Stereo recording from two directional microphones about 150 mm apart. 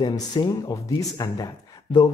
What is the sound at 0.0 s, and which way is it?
Speech, 30° left (ahead or behind).